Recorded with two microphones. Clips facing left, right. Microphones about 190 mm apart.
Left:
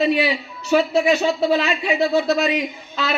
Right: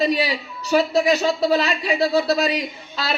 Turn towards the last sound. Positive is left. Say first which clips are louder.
# left 2 dB
turn(degrees=-35)  # may be behind; listen again after turning